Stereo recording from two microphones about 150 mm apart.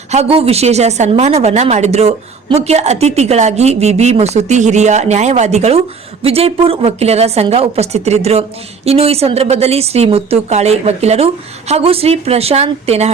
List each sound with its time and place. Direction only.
0.1 s a woman's voice: 40° right (ahead or behind)